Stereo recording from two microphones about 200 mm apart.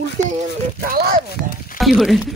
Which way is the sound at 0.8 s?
45° right (ahead or behind).